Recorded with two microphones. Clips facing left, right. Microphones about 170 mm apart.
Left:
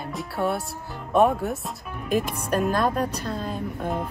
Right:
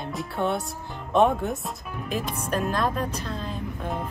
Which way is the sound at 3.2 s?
45° left (ahead or behind).